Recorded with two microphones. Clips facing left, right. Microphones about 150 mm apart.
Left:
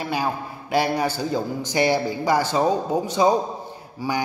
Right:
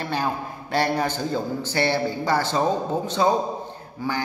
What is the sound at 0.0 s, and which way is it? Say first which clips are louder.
A man's voice: left 1 dB; 10° left (ahead or behind).